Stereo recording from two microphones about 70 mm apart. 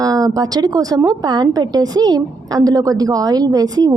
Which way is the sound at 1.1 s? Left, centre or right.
Right.